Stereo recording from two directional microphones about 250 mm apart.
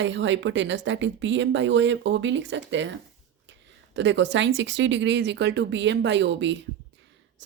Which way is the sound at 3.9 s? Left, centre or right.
Right.